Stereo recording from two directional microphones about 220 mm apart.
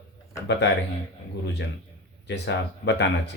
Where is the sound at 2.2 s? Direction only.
50° left (ahead or behind).